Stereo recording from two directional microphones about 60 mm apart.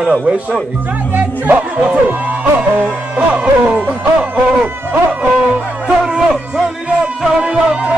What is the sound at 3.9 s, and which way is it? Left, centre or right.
Music, right.